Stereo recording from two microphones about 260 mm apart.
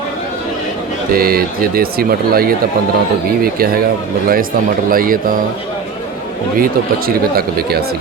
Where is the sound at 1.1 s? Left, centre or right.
Right.